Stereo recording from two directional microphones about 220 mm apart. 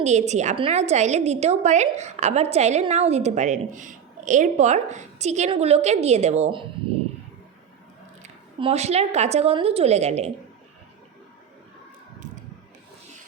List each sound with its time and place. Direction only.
0.0 s a woman's voice: 30° right (ahead or behind)
8.2 s a woman's voice: 25° right (ahead or behind)